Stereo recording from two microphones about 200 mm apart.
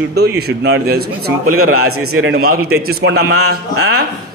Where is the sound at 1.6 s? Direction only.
90° right.